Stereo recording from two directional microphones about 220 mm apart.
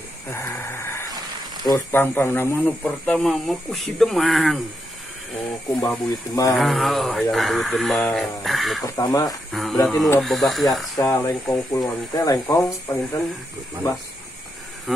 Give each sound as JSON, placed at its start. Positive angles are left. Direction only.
{"t": 0.3, "sound": "a sound", "side_deg": 10}
{"t": 1.7, "sound": "speech", "side_deg": 10}
{"t": 5.4, "sound": "speech", "side_deg": 15}
{"t": 6.6, "sound": "speech", "side_deg": 0}
{"t": 8.8, "sound": "speech", "side_deg": 15}
{"t": 9.5, "sound": "speech", "side_deg": 0}
{"t": 11.0, "sound": "speech", "side_deg": 15}